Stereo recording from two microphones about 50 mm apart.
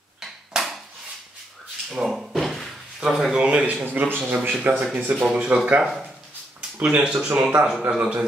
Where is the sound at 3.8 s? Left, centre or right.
Right.